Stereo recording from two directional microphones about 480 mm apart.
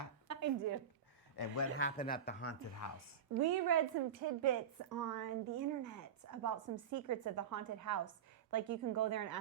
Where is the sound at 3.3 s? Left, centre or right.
Right.